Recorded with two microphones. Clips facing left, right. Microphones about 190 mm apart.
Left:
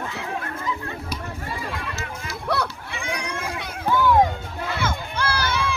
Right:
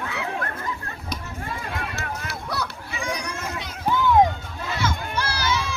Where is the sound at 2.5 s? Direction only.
55° left (ahead or behind).